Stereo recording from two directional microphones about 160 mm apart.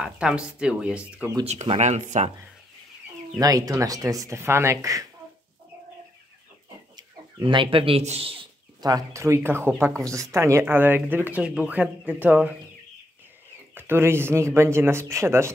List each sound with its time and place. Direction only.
0.0 s speech: 5° right (ahead or behind)
1.4 s speech: 40° right (ahead or behind)
3.3 s speech: 25° right (ahead or behind)
7.0 s speech: 30° right (ahead or behind)
8.8 s speech: 20° right (ahead or behind)
13.7 s speech: 15° right (ahead or behind)